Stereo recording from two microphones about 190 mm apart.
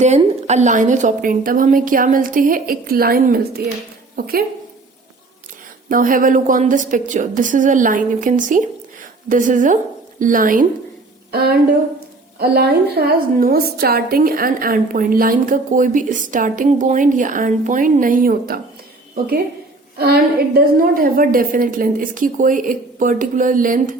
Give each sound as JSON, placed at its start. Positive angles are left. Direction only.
{"t": 0.0, "sound": "a woman's voice", "side_deg": -35}
{"t": 5.9, "sound": "a woman's voice", "side_deg": -45}
{"t": 20.0, "sound": "a woman's voice", "side_deg": -55}